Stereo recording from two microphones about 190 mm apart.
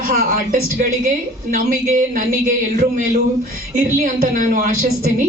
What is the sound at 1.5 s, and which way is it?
Speech, 45° right (ahead or behind).